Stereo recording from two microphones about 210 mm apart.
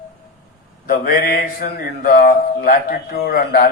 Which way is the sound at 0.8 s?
45° left (ahead or behind).